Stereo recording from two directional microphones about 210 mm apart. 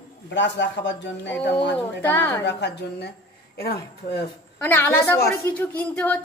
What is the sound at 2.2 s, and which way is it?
Speech, 55° left (ahead or behind).